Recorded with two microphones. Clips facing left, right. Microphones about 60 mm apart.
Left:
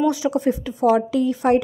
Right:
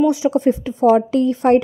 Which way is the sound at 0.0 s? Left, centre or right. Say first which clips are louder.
Right 4 dB; right.